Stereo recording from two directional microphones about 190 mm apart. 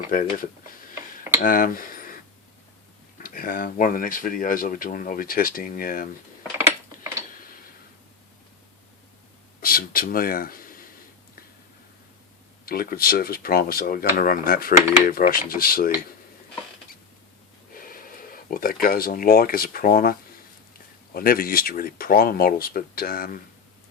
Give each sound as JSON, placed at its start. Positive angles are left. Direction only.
{"t": 0.1, "sound": "speech", "side_deg": 45}
{"t": 3.2, "sound": "speech", "side_deg": 45}
{"t": 9.6, "sound": "speech", "side_deg": 50}
{"t": 12.6, "sound": "speech", "side_deg": 50}
{"t": 17.7, "sound": "speech", "side_deg": 50}